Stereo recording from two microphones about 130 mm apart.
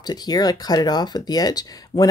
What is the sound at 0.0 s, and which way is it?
Speech, 30° left (ahead or behind).